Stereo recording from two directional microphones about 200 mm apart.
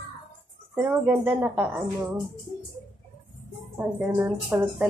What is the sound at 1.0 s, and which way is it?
Speech, 10° right (ahead or behind).